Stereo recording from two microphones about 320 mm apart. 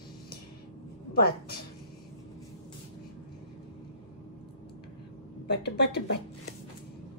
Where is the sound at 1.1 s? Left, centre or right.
Left.